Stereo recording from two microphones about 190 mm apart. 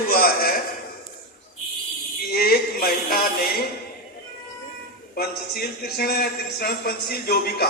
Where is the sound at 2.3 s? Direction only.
50° left (ahead or behind).